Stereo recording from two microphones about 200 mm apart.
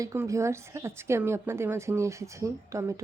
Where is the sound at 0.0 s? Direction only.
15° right (ahead or behind).